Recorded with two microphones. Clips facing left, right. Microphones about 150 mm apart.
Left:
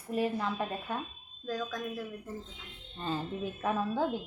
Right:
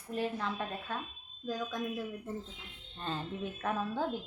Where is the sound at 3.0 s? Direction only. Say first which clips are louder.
Left 3 dB; 5° left (ahead or behind).